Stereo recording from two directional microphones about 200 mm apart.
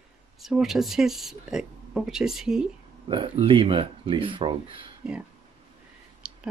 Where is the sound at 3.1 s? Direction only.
25° right (ahead or behind).